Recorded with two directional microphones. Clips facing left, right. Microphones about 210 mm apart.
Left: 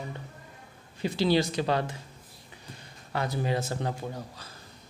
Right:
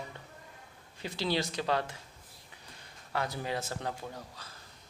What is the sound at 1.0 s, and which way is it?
Speech, 5° left (ahead or behind).